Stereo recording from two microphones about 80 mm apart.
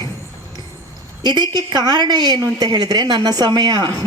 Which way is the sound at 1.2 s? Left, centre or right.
Right.